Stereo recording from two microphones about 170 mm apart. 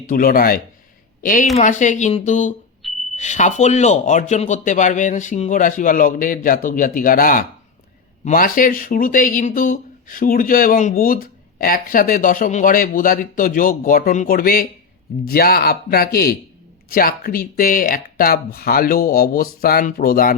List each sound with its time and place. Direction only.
0.1 s speech: 60° left (ahead or behind)
2.8 s a sound: centre (ahead or behind)
3.2 s speech: 45° left (ahead or behind)